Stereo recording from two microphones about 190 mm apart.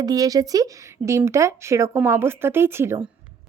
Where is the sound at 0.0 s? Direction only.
20° right (ahead or behind).